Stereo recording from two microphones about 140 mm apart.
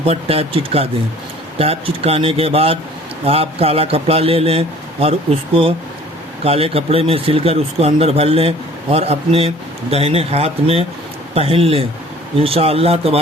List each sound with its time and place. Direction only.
0.0 s speech: 45° right (ahead or behind)
6.4 s speech: 45° right (ahead or behind)